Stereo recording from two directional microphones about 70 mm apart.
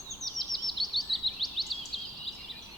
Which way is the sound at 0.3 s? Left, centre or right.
Centre.